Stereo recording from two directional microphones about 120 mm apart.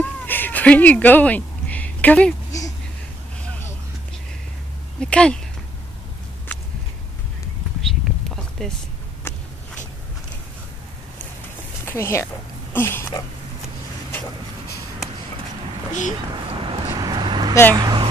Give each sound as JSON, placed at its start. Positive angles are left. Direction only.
{"t": 0.0, "sound": "cat", "side_deg": 15}
{"t": 5.0, "sound": "speech", "side_deg": 10}
{"t": 8.4, "sound": "a sound", "side_deg": 5}
{"t": 9.3, "sound": "a sound", "side_deg": 20}
{"t": 11.8, "sound": "speech", "side_deg": 20}
{"t": 12.7, "sound": "a sound", "side_deg": 20}
{"t": 15.9, "sound": "speech", "side_deg": 90}
{"t": 16.5, "sound": "vehicle", "side_deg": -45}
{"t": 17.0, "sound": "vehicle", "side_deg": -35}
{"t": 17.7, "sound": "speech", "side_deg": -35}